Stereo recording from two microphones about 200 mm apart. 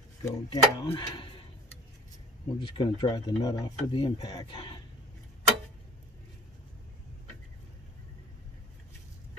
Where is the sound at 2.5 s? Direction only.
25° left (ahead or behind).